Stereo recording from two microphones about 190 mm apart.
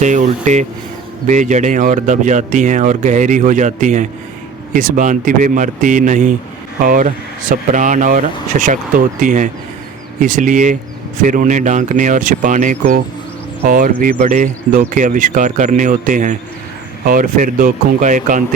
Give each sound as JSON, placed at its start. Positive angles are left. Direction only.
{"t": 0.0, "sound": "speech", "side_deg": -40}